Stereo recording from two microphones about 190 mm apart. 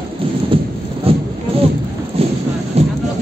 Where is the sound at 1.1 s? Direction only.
30° right (ahead or behind).